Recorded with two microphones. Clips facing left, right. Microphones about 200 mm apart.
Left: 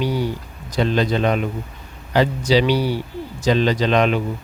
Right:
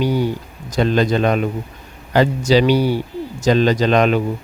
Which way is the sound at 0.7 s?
45° right (ahead or behind).